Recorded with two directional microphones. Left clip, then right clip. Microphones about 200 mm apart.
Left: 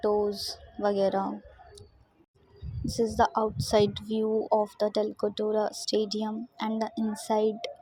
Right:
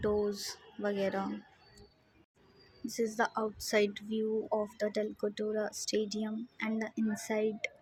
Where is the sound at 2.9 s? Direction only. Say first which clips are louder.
Left 7 dB; 10° left (ahead or behind).